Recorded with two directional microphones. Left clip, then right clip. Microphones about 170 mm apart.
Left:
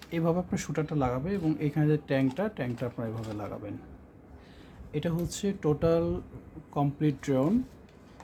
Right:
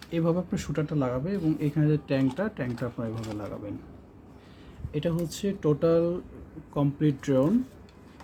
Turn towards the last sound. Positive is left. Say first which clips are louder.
# right 3 dB
turn(degrees=15)  # may be behind; listen again after turning